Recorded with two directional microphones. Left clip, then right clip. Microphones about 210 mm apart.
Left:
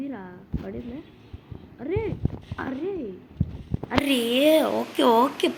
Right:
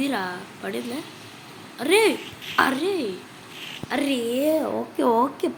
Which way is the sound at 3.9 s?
Centre (ahead or behind).